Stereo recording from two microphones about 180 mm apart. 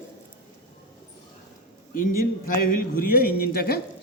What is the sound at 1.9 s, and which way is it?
A man's voice, 50° left (ahead or behind).